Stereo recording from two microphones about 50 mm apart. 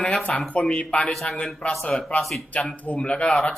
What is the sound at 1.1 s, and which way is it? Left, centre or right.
Speech, centre.